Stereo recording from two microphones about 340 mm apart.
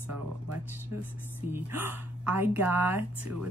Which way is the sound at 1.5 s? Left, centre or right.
Centre.